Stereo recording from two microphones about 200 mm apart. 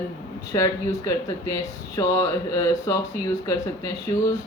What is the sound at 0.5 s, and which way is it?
Speech, 15° left (ahead or behind).